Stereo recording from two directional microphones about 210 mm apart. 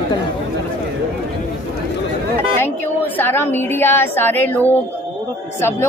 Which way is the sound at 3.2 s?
10° left (ahead or behind).